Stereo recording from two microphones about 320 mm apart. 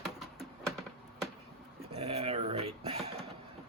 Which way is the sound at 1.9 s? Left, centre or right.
Centre.